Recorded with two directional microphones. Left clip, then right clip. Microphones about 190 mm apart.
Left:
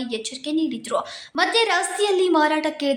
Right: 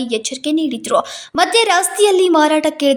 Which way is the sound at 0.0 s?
40° right (ahead or behind).